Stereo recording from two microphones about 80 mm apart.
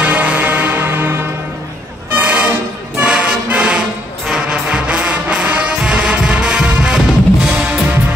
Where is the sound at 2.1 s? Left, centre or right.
Centre.